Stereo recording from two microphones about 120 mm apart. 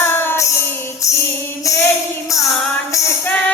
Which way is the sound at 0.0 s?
20° left (ahead or behind).